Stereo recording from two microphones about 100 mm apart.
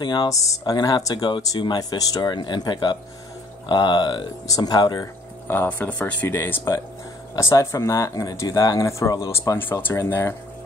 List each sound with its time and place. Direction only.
0.0 s speech: 50° left (ahead or behind)
5.5 s speech: 20° left (ahead or behind)
9.6 s speech: 20° left (ahead or behind)